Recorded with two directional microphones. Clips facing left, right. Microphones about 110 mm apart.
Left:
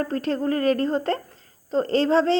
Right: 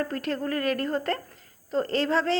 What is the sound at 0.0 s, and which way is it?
A woman's voice, 30° left (ahead or behind).